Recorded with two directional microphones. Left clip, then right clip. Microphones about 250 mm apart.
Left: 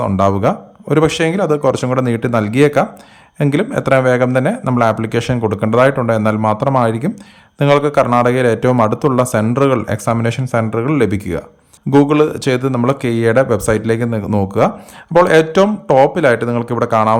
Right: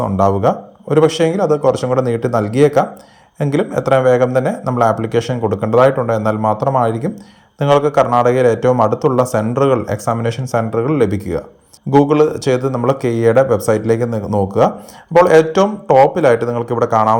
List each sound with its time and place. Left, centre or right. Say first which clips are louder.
0.0 s speech: even; left
0.9 s a man's voice: right 1 dB; centre
4.6 s a man's voice: even; left
7.9 s speech: even; left
8.3 s a man's voice: right 1 dB; centre
9.0 s a man's voice: even; left
9.3 s a man's voice: even; centre
14.2 s speech: right 1 dB; left
15.3 s a man's voice: even; centre
16.9 s speech: even; left